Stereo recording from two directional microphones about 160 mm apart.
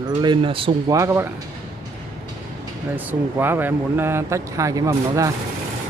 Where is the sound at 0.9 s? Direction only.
20° right (ahead or behind).